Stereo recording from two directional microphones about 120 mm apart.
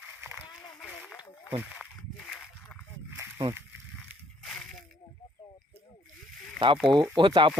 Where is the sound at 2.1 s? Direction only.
5° left (ahead or behind).